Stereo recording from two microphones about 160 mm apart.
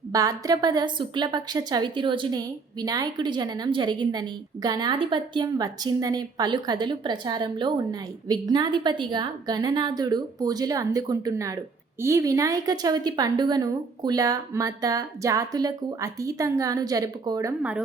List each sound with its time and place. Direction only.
0.1 s a woman's voice: 20° right (ahead or behind)
17.6 s speech: 10° right (ahead or behind)